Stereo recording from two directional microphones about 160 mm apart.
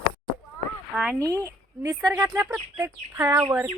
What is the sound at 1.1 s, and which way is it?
Speech, 20° right (ahead or behind).